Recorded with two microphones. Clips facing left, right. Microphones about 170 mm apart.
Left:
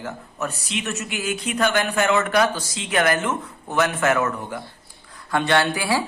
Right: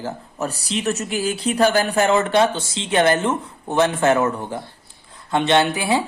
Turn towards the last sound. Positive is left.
turn(degrees=-20)  # may be behind; listen again after turning